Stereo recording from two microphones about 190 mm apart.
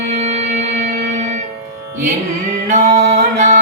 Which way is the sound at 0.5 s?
40° right (ahead or behind).